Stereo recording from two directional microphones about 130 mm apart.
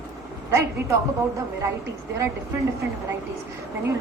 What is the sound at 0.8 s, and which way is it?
Speech, 20° right (ahead or behind).